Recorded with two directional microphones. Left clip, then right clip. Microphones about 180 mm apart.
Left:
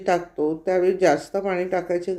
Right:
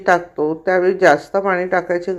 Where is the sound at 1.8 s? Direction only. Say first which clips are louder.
Right 5 dB; 55° right (ahead or behind).